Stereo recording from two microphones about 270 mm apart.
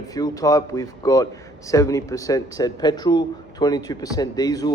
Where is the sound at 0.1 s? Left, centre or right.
Centre.